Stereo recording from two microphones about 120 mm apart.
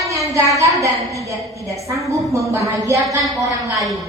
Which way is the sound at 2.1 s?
25° right (ahead or behind).